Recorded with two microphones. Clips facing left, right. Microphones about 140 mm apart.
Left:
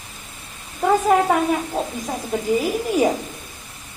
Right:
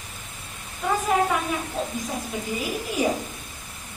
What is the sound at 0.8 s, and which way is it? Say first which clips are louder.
Speech: left 6 dB; 55° left (ahead or behind).